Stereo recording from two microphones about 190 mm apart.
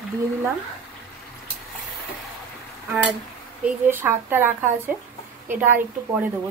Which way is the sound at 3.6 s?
10° right (ahead or behind).